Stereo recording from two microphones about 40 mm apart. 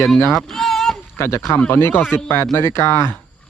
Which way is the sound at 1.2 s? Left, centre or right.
Left.